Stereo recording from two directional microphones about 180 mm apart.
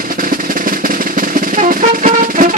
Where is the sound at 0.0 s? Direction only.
50° right (ahead or behind).